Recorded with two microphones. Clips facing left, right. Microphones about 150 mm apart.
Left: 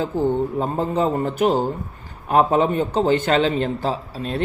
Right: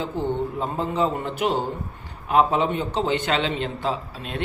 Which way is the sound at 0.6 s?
45° left (ahead or behind).